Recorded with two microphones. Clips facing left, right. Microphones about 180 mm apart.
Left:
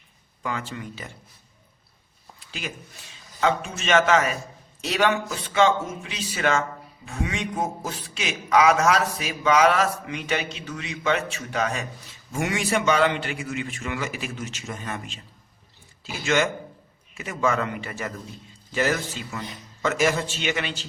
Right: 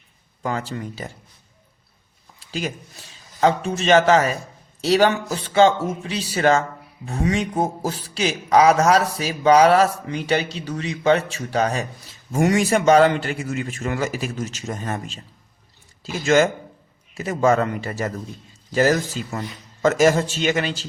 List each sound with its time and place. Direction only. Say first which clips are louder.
0.4 s a man's voice: right 5 dB; 40° right (ahead or behind)
2.5 s a man's voice: right 8 dB; 40° right (ahead or behind)
16.2 s a man's voice: right 6 dB; 40° right (ahead or behind)